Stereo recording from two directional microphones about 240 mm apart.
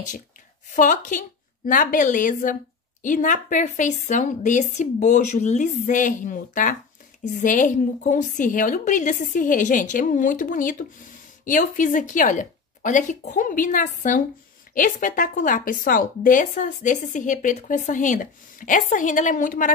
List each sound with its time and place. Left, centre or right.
0.7 s a woman's voice: left